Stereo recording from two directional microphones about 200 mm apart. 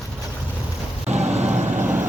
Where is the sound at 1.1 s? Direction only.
35° right (ahead or behind).